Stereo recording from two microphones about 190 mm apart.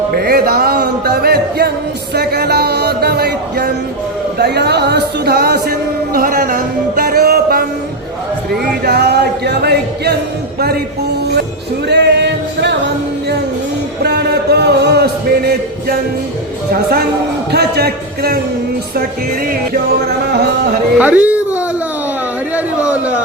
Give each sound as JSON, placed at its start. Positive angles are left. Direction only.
{"t": 0.1, "sound": "music", "side_deg": -55}
{"t": 11.9, "sound": "singing", "side_deg": -65}
{"t": 14.0, "sound": "a sound", "side_deg": -60}
{"t": 16.7, "sound": "music", "side_deg": -55}
{"t": 19.7, "sound": "music", "side_deg": -55}
{"t": 21.0, "sound": "music", "side_deg": -10}
{"t": 22.5, "sound": "a sound", "side_deg": -5}